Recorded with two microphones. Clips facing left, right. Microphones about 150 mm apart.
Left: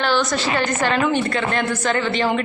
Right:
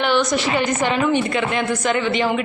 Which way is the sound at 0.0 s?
20° right (ahead or behind).